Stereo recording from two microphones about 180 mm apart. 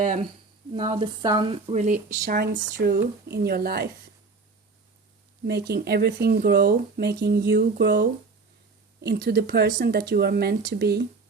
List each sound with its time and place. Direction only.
0.7 s speech: 30° right (ahead or behind); by 3.8 s 60° right (ahead or behind)
5.5 s speech: 65° right (ahead or behind)